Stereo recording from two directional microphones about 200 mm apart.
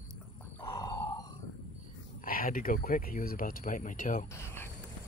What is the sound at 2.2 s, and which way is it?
Speech, 45° left (ahead or behind).